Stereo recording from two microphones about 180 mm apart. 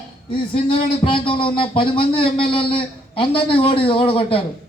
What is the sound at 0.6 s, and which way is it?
Speech, 30° left (ahead or behind).